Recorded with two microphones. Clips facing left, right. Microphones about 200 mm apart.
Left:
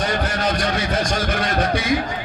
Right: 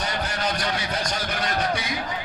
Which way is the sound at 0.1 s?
50° left (ahead or behind).